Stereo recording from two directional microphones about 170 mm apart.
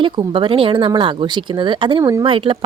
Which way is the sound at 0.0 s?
30° right (ahead or behind).